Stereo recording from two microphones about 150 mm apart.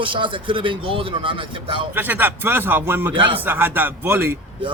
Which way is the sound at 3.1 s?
35° right (ahead or behind).